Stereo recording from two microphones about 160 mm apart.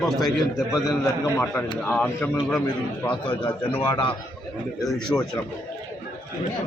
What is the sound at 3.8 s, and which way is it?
Speech, 30° left (ahead or behind).